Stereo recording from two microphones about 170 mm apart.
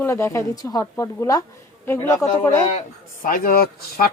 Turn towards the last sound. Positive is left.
turn(degrees=60)  # may be behind; listen again after turning